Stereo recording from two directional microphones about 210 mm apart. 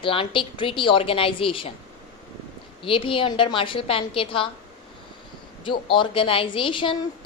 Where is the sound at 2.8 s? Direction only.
25° left (ahead or behind).